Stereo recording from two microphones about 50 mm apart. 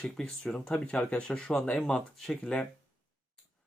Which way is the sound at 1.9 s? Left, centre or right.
Centre.